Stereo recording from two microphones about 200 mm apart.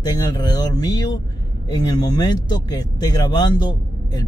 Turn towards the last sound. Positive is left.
turn(degrees=20)  # may be behind; listen again after turning